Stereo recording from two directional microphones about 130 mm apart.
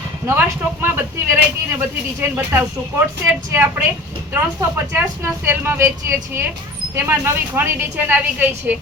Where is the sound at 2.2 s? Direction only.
20° right (ahead or behind).